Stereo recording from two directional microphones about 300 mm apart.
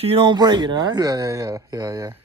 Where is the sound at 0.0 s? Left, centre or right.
Centre.